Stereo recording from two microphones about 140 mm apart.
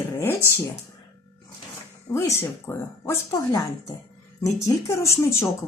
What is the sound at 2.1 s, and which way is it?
Speech, 20° left (ahead or behind).